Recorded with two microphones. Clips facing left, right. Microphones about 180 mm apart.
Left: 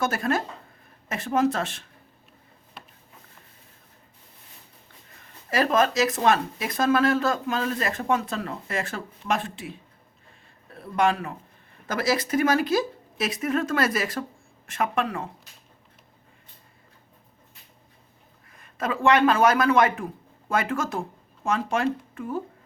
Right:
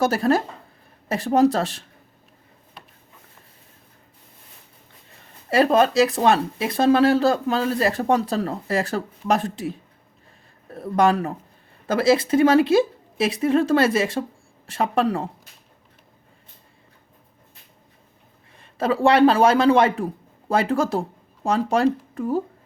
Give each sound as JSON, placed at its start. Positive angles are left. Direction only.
{"t": 0.0, "sound": "speech", "side_deg": -35}
{"t": 5.5, "sound": "a man's voice", "side_deg": -30}
{"t": 11.9, "sound": "speech", "side_deg": -30}
{"t": 18.5, "sound": "speech", "side_deg": -30}